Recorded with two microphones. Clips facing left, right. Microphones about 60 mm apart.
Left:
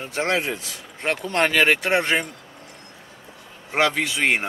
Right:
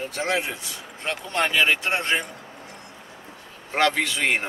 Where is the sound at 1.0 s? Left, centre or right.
Left.